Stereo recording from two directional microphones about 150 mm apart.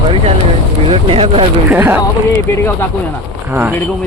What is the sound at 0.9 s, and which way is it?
Speech, 40° right (ahead or behind).